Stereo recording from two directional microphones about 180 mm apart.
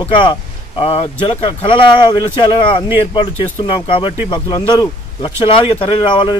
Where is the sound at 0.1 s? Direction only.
25° left (ahead or behind).